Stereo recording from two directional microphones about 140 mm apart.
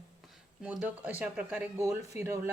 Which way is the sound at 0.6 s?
10° right (ahead or behind).